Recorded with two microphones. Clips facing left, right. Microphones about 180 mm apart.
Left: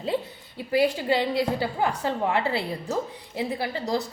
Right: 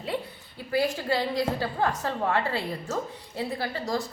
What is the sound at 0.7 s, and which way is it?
A woman's voice, 20° left (ahead or behind).